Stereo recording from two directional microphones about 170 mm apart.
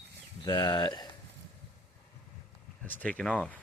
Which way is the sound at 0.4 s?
25° left (ahead or behind).